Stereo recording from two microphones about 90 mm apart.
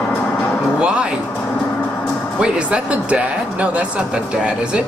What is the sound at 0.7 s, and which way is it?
Speech, 10° right (ahead or behind).